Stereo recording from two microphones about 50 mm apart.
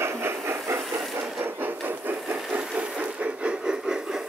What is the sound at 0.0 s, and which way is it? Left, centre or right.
Hiss, right.